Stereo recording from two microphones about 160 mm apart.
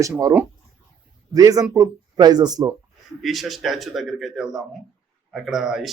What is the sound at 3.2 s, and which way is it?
A man's voice, centre (ahead or behind).